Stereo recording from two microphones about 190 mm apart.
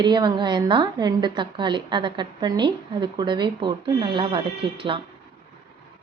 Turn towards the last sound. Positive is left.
turn(degrees=-25)  # may be behind; listen again after turning